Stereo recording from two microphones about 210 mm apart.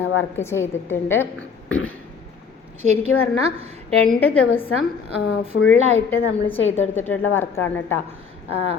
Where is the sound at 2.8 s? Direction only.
35° right (ahead or behind).